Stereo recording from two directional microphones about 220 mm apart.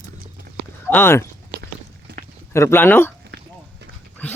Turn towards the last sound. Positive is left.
turn(degrees=10)  # may be behind; listen again after turning